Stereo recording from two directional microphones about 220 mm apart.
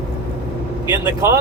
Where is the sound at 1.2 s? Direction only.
10° right (ahead or behind).